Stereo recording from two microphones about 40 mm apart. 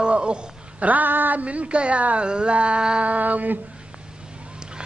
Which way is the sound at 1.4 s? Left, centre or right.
Right.